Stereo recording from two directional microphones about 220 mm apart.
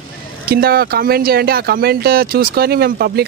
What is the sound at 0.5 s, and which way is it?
Speech, 45° right (ahead or behind).